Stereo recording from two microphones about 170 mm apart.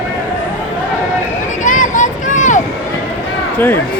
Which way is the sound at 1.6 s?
50° left (ahead or behind).